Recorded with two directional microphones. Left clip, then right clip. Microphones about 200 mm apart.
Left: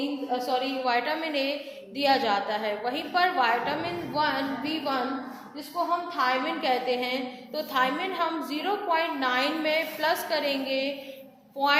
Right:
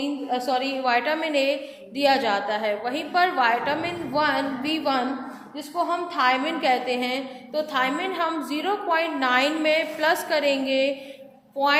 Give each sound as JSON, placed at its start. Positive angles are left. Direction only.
{"t": 0.0, "sound": "a woman's voice", "side_deg": -40}